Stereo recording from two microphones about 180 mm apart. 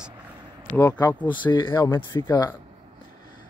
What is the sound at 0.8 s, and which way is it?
A man's voice, 20° left (ahead or behind).